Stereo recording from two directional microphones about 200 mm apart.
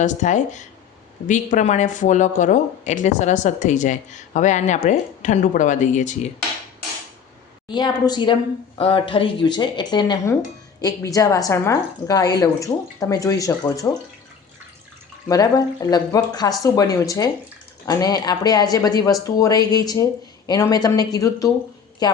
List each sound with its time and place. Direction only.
0.0 s speech: 35° left (ahead or behind)
7.7 s a woman's voice: 20° left (ahead or behind)
15.3 s a woman's voice: 20° left (ahead or behind)